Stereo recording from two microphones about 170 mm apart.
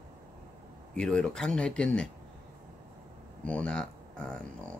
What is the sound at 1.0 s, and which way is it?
Speech, 5° left (ahead or behind).